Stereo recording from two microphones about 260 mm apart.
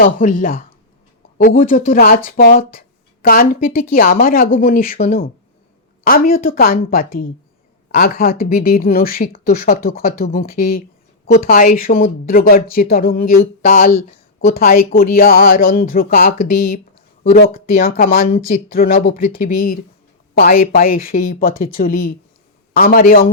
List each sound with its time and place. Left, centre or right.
0.0 s speech: left
6.3 s speech: left